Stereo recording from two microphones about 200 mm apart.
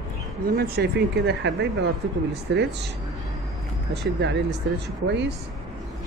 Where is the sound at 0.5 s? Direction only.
50° right (ahead or behind).